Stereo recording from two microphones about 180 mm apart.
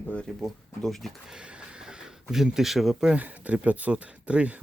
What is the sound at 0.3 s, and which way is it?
Speech, centre (ahead or behind).